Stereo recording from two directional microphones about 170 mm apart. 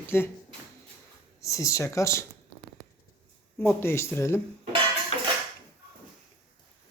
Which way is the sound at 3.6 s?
15° left (ahead or behind).